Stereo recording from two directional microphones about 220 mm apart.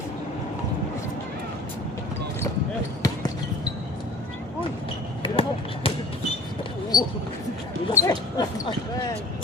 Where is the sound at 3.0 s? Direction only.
15° left (ahead or behind).